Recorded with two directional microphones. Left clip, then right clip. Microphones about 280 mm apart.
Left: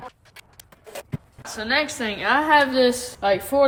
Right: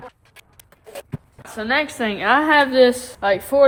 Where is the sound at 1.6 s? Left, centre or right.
Centre.